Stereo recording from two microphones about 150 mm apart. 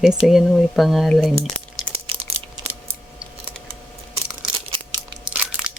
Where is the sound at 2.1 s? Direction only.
40° right (ahead or behind).